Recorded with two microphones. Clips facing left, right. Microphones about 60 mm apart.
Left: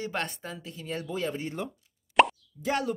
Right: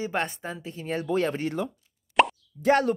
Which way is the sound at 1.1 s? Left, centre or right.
Right.